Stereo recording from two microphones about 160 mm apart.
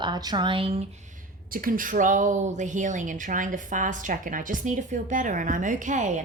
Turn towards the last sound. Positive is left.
turn(degrees=-50)  # may be behind; listen again after turning